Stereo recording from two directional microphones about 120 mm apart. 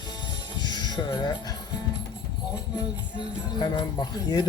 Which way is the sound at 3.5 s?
40° left (ahead or behind).